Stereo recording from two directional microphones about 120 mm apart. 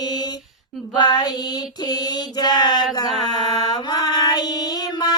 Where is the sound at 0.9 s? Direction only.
35° left (ahead or behind).